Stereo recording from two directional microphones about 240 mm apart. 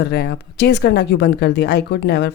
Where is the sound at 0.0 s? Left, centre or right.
Left.